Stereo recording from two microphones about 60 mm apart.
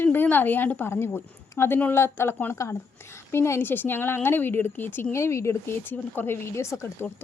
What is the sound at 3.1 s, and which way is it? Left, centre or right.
Speech, left.